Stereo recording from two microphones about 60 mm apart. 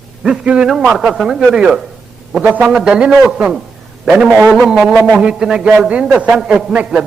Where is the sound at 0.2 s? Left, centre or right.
Centre.